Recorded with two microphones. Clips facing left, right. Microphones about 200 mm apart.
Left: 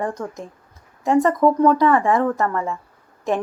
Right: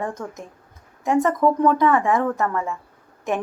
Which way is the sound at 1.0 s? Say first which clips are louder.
Left 2 dB; 25° left (ahead or behind).